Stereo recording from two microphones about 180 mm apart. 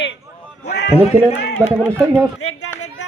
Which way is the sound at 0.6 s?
70° left (ahead or behind).